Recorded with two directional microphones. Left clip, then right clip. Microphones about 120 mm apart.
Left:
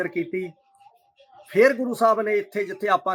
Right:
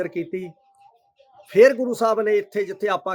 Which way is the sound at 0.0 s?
75° right (ahead or behind).